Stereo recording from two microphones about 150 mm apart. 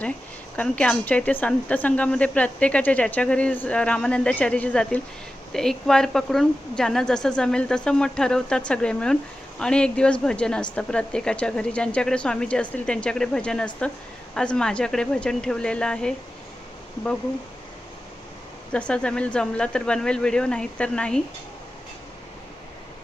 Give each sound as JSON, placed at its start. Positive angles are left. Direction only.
{"t": 0.5, "sound": "a woman's voice", "side_deg": 10}
{"t": 18.7, "sound": "speech", "side_deg": 5}